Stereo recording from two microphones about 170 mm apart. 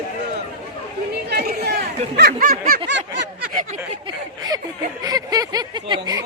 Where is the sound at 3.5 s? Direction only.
50° right (ahead or behind).